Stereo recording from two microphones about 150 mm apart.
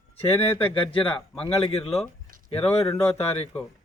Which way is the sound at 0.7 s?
35° left (ahead or behind).